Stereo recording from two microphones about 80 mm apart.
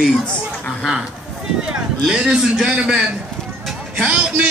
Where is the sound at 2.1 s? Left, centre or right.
Centre.